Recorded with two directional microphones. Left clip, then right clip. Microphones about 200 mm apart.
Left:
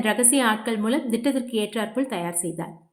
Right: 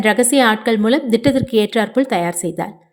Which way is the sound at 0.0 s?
35° right (ahead or behind).